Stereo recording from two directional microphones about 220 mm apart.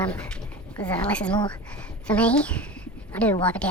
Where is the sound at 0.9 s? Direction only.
5° left (ahead or behind).